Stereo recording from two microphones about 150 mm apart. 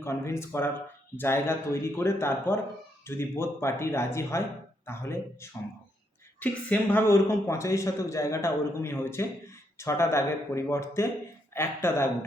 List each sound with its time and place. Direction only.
0.0 s a man's voice: 15° left (ahead or behind)